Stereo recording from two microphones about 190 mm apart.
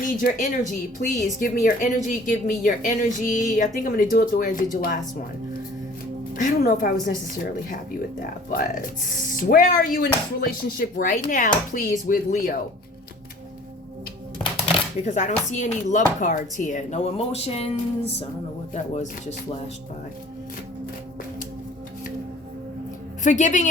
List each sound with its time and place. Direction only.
0.0 s speech: 45° left (ahead or behind)
6.3 s speech: 50° left (ahead or behind)
8.5 s speech: 45° left (ahead or behind)
15.0 s speech: 35° left (ahead or behind)
23.2 s speech: 40° left (ahead or behind)